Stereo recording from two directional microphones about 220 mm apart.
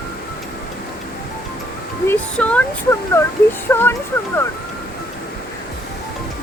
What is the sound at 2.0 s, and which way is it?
Speech, 5° left (ahead or behind).